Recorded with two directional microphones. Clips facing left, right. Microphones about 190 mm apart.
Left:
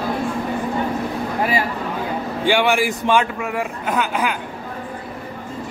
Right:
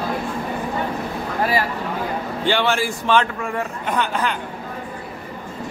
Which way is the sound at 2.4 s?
15° left (ahead or behind).